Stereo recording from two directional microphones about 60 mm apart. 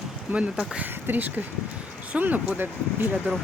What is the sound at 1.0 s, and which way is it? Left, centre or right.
A woman's voice, right.